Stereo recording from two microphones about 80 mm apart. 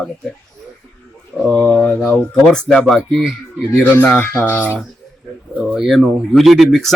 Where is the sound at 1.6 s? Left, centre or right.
Centre.